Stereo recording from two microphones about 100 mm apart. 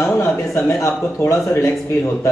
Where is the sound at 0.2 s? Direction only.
30° left (ahead or behind).